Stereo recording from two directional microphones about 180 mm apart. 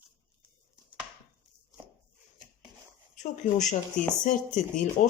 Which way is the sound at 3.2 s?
45° left (ahead or behind).